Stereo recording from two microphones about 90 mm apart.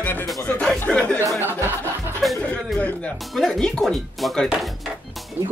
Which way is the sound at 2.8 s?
15° left (ahead or behind).